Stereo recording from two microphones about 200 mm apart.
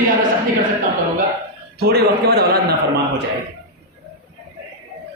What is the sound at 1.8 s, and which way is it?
Speech, 50° right (ahead or behind).